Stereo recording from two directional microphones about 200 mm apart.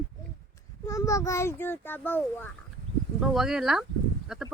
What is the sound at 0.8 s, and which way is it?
A child's voice, 15° left (ahead or behind).